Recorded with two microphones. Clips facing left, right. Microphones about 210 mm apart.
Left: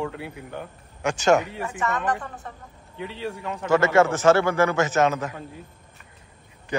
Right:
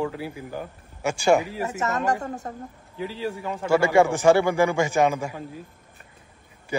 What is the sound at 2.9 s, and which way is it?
Speech, centre (ahead or behind).